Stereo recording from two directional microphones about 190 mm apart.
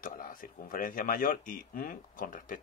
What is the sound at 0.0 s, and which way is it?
Speech, 45° left (ahead or behind).